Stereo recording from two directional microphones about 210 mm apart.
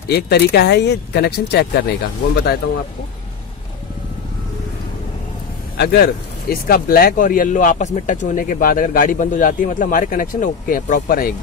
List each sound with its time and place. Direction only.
0.1 s speech: 50° left (ahead or behind)
5.8 s speech: 50° left (ahead or behind)